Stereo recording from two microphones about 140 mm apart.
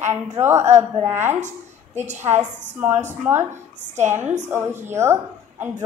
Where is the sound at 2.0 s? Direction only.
55° right (ahead or behind).